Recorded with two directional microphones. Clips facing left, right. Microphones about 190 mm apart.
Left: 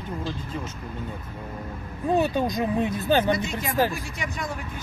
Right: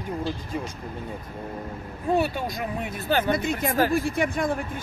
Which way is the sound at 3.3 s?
55° right (ahead or behind).